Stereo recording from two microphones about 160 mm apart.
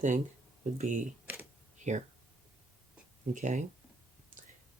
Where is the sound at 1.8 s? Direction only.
50° right (ahead or behind).